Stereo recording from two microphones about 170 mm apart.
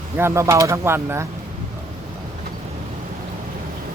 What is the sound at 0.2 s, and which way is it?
Speech, 15° right (ahead or behind).